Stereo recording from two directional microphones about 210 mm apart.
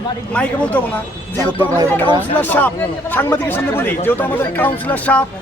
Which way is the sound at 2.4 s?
10° left (ahead or behind).